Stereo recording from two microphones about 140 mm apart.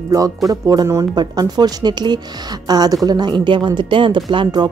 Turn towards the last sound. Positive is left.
turn(degrees=-35)  # may be behind; listen again after turning